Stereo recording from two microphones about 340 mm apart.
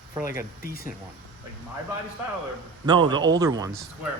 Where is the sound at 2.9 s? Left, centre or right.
Centre.